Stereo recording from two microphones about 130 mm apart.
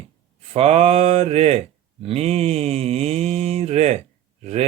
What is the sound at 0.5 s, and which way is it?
Mantra, 50° right (ahead or behind).